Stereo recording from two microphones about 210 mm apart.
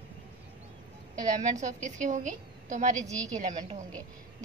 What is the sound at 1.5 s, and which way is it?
A woman's voice, 35° right (ahead or behind).